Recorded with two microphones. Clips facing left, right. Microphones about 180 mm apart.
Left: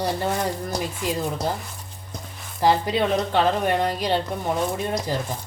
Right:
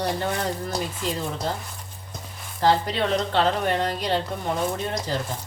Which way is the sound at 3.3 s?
10° left (ahead or behind).